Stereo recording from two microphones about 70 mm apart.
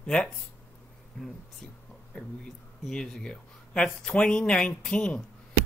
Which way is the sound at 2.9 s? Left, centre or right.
Centre.